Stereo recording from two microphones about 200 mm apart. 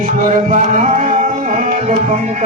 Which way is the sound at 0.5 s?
40° right (ahead or behind).